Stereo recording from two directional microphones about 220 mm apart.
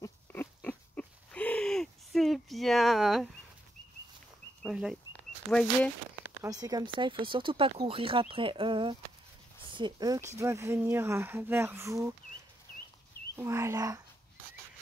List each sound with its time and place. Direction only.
0.0 s a sound: 10° left (ahead or behind)
4.6 s speech: 5° right (ahead or behind)
6.4 s speech: 15° right (ahead or behind)
13.4 s speech: 15° right (ahead or behind)